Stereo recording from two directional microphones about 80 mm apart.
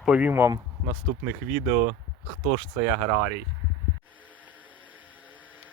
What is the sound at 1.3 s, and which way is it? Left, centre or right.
Speech, right.